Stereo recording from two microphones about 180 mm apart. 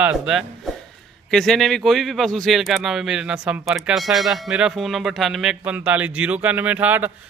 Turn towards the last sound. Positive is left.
turn(degrees=-10)  # may be behind; listen again after turning